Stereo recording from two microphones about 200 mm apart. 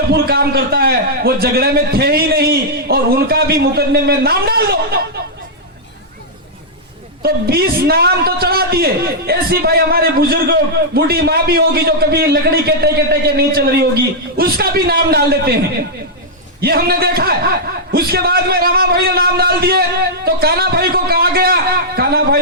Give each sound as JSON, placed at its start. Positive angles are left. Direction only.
{"t": 0.1, "sound": "a man's voice", "side_deg": -50}
{"t": 7.2, "sound": "a man's voice", "side_deg": -50}